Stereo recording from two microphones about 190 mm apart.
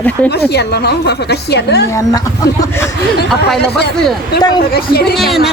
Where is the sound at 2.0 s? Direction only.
20° left (ahead or behind).